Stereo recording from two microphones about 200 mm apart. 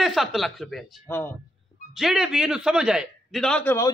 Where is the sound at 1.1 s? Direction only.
10° left (ahead or behind).